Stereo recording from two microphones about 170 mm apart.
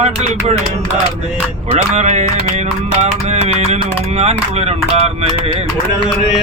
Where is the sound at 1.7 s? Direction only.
40° right (ahead or behind).